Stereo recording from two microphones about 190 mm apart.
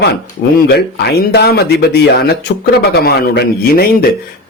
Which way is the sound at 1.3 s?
60° left (ahead or behind).